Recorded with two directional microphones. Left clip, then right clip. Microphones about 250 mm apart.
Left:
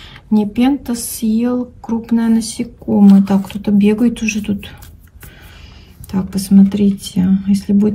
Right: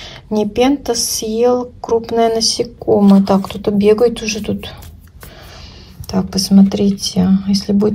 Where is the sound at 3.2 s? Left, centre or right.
Right.